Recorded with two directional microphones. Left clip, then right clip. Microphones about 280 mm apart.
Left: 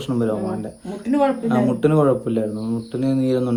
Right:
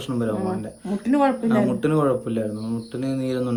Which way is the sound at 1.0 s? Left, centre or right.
Centre.